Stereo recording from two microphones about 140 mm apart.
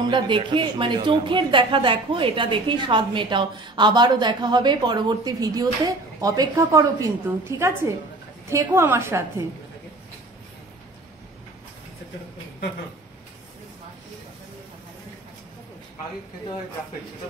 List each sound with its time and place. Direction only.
0.1 s a woman's voice: 35° right (ahead or behind); by 9.2 s 20° right (ahead or behind)